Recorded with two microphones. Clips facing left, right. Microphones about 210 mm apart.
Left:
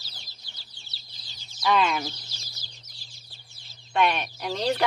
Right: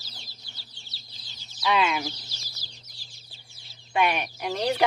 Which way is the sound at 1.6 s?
5° right (ahead or behind).